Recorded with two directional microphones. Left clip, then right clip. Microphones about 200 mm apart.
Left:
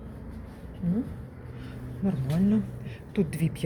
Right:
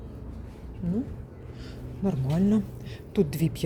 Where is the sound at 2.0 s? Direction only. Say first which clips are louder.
Right 2 dB; 25° right (ahead or behind).